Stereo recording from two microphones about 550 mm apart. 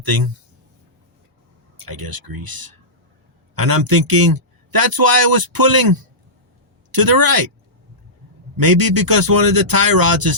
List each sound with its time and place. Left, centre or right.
1.8 s a man's voice: right
6.9 s a man's voice: right
8.5 s a man's voice: right